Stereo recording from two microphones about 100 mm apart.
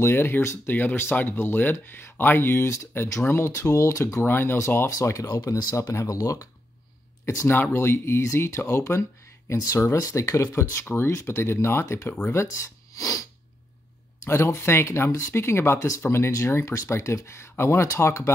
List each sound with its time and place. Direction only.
0.0 s speech: 25° left (ahead or behind); by 5.8 s 40° left (ahead or behind)
5.8 s speech: 30° left (ahead or behind)
7.2 s speech: 25° left (ahead or behind)
14.2 s speech: 25° left (ahead or behind)